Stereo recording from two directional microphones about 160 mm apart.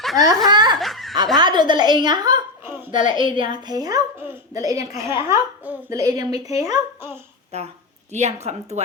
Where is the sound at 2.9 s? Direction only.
30° right (ahead or behind).